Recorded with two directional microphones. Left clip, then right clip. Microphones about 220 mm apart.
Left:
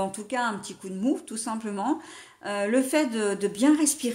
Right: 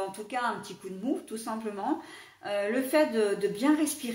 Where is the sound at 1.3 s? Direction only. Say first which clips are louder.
Left 3 dB; 45° left (ahead or behind).